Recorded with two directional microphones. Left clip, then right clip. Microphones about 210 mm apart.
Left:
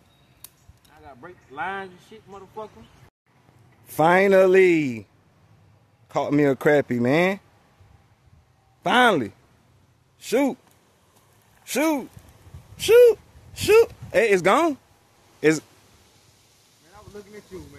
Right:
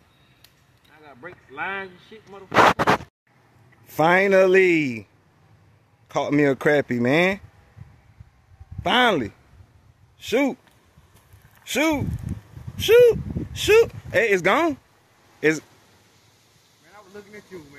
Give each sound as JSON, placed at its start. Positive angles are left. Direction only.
{"t": 0.8, "sound": "speech", "side_deg": 15}
{"t": 3.8, "sound": "speech", "side_deg": 0}
{"t": 6.0, "sound": "speech", "side_deg": 0}
{"t": 8.8, "sound": "speech", "side_deg": 0}
{"t": 11.6, "sound": "speech", "side_deg": -5}